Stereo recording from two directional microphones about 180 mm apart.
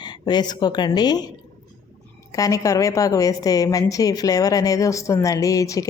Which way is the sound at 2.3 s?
20° left (ahead or behind).